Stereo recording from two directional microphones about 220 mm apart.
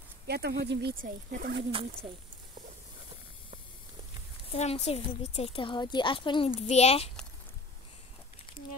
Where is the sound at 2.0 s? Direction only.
25° right (ahead or behind).